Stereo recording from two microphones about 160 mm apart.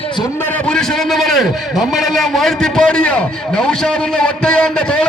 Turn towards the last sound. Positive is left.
turn(degrees=5)  # may be behind; listen again after turning